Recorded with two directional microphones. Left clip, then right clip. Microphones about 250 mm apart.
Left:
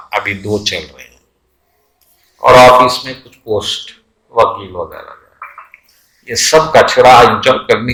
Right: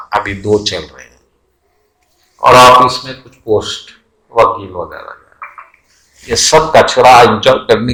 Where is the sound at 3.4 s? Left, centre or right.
Centre.